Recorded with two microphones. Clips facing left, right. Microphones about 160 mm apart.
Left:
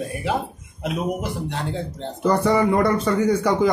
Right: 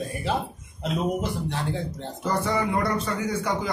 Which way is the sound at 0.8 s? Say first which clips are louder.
Left 1 dB; 15° left (ahead or behind).